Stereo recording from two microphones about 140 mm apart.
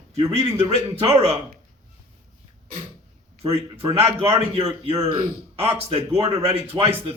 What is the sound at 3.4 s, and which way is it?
Speech, 45° right (ahead or behind).